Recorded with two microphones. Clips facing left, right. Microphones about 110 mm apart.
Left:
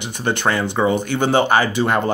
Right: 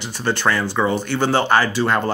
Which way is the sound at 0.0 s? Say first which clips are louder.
Even; 20° left (ahead or behind).